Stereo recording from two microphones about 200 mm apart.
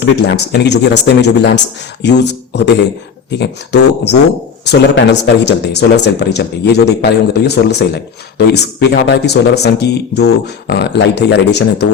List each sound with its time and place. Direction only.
0.0 s speech: 60° left (ahead or behind)